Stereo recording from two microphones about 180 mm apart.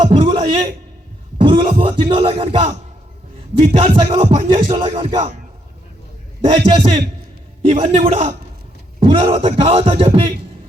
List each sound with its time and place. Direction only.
0.0 s a man's voice: 30° right (ahead or behind)
6.5 s speech: 30° right (ahead or behind)